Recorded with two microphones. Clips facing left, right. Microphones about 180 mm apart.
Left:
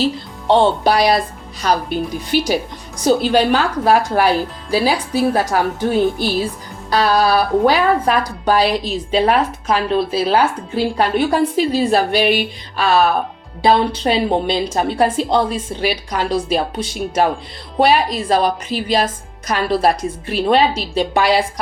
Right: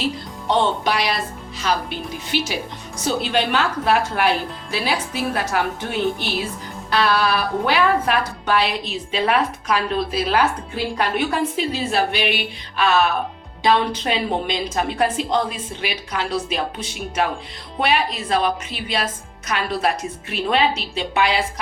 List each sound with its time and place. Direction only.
0.0 s a woman's voice: 30° left (ahead or behind)